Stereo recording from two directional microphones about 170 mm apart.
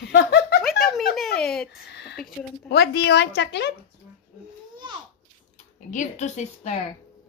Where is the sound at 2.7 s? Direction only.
70° left (ahead or behind).